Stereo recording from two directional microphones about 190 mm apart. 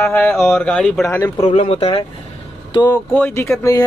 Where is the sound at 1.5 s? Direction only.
30° left (ahead or behind).